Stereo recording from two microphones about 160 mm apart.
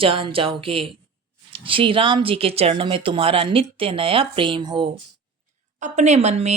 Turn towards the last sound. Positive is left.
turn(degrees=-45)  # may be behind; listen again after turning